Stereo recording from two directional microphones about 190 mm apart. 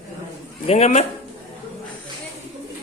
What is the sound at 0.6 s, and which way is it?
Speech, 35° left (ahead or behind).